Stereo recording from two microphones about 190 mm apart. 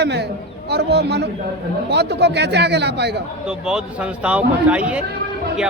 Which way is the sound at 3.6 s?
5° right (ahead or behind).